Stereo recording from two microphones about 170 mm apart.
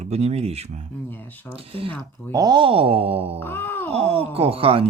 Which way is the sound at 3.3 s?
15° left (ahead or behind).